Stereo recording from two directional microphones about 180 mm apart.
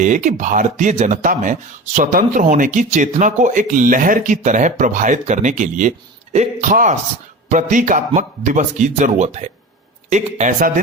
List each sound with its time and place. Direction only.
0.0 s a man's voice: 45° right (ahead or behind)